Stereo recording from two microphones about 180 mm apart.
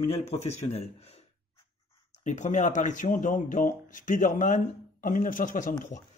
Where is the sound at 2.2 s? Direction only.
40° left (ahead or behind).